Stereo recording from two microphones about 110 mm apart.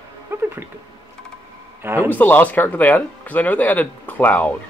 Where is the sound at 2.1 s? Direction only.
15° left (ahead or behind).